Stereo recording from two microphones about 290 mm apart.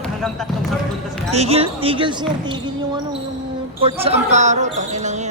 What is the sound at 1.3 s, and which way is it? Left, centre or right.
Speech, right.